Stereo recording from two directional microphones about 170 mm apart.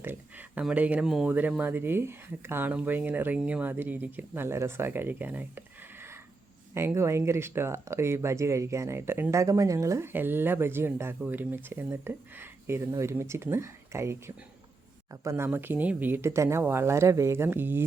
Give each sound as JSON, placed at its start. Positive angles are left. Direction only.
{"t": 0.0, "sound": "speech", "side_deg": -10}